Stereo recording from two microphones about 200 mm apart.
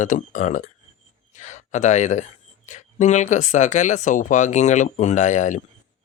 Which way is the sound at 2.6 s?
35° left (ahead or behind).